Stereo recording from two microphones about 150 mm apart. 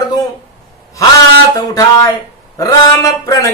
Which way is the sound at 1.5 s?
25° left (ahead or behind).